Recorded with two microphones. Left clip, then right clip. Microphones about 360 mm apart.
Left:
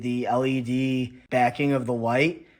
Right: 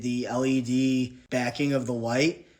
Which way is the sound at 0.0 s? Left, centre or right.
Centre.